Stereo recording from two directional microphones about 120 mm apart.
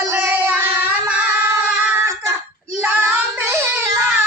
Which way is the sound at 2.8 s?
15° right (ahead or behind).